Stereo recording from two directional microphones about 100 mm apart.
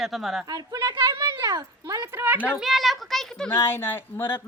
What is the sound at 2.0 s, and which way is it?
A man's voice, 20° right (ahead or behind).